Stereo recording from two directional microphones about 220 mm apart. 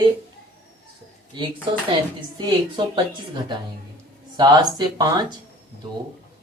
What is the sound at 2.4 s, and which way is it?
Speech, 20° right (ahead or behind).